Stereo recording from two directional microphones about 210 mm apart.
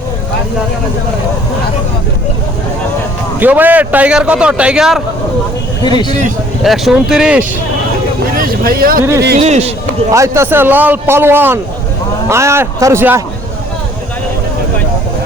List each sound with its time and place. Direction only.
3.4 s a man's voice: 10° right (ahead or behind)
5.8 s speech: 20° left (ahead or behind)
6.6 s a man's voice: centre (ahead or behind)
8.4 s a sound: 45° right (ahead or behind)
9.4 s speech: 30° right (ahead or behind)
10.1 s a man's voice: 15° right (ahead or behind)